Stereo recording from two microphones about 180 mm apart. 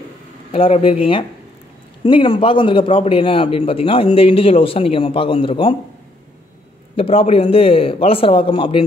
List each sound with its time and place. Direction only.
0.5 s a man's voice: 30° left (ahead or behind)
7.0 s a man's voice: 30° left (ahead or behind)